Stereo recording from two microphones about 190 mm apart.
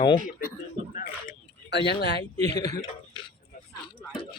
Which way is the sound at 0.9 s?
45° left (ahead or behind).